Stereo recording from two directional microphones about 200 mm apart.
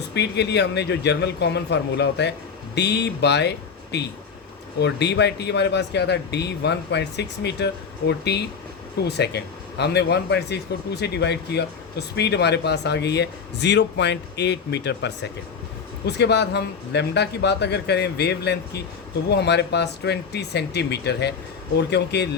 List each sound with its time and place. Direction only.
0.1 s a man's voice: 60° left (ahead or behind)